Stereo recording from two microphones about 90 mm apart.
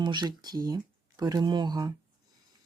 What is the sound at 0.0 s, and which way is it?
Speech, 55° right (ahead or behind).